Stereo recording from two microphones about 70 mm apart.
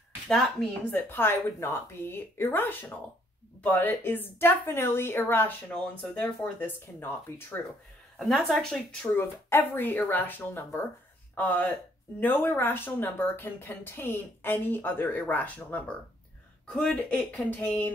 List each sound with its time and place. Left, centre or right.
0.3 s speech: centre
1.0 s a woman's voice: left
8.2 s speech: centre
9.2 s a woman's voice: left